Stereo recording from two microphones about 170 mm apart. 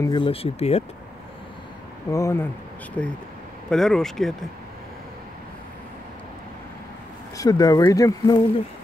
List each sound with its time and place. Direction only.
0.0 s speech: 30° left (ahead or behind)
2.0 s speech: 20° left (ahead or behind)
3.0 s speech: 5° left (ahead or behind)
7.3 s speech: 20° left (ahead or behind)